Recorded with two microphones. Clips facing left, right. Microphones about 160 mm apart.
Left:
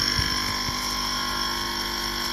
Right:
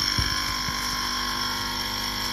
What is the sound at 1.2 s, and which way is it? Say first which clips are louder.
Vehicle: left 1 dB; centre (ahead or behind).